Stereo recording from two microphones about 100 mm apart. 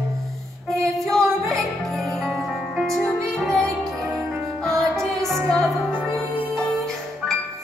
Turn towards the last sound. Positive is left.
turn(degrees=0)  # may be behind; listen again after turning